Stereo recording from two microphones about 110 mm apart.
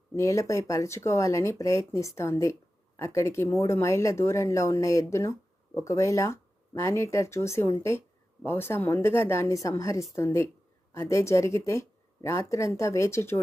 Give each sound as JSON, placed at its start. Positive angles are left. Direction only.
{"t": 0.1, "sound": "speech", "side_deg": 30}